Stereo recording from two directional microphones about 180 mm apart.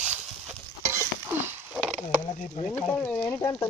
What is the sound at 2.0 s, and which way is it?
Speech, 30° left (ahead or behind).